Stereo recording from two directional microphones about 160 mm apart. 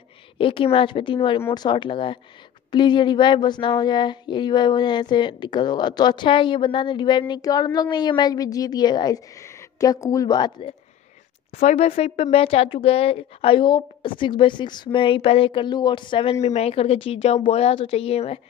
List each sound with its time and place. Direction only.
0.4 s speech: 35° left (ahead or behind)
11.5 s speech: 45° left (ahead or behind)